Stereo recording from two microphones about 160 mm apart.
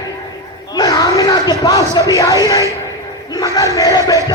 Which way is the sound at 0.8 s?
20° left (ahead or behind).